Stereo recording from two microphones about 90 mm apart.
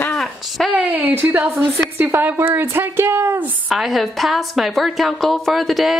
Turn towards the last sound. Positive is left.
turn(degrees=0)  # may be behind; listen again after turning